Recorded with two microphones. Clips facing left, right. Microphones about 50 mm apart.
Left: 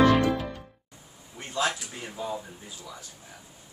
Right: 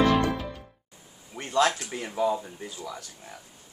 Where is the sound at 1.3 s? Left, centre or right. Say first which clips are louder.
Right 5 dB; right.